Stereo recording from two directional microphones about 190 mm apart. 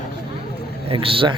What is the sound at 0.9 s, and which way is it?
Speech, 30° right (ahead or behind).